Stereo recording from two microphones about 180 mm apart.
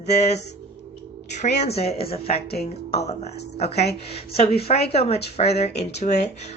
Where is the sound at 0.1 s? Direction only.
35° left (ahead or behind).